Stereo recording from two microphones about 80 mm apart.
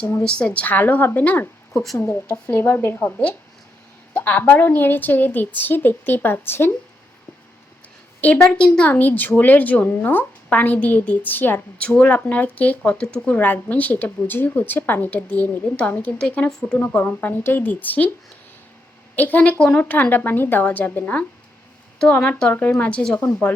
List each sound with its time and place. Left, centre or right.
0.2 s speech: centre; by 6.7 s left
8.2 s speech: centre
8.6 s speech: centre
8.9 s speech: left; by 16.7 s centre
16.7 s speech: left
19.1 s speech: left
21.9 s speech: centre